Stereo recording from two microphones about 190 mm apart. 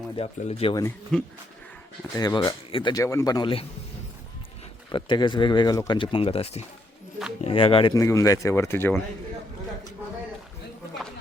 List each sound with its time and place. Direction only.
0.2 s speech: 30° left (ahead or behind)
1.1 s speech: 5° left (ahead or behind)
2.1 s speech: 20° left (ahead or behind)
4.9 s speech: 25° left (ahead or behind)
7.9 s speech: 15° left (ahead or behind)